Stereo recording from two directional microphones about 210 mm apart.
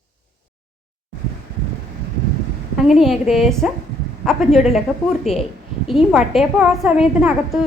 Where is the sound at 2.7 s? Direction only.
Centre (ahead or behind).